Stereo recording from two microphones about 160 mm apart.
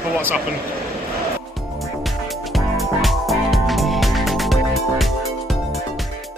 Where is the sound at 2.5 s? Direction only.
Centre (ahead or behind).